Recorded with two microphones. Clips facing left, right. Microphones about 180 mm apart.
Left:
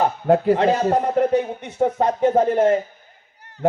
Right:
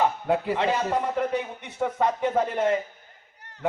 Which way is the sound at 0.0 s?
45° left (ahead or behind).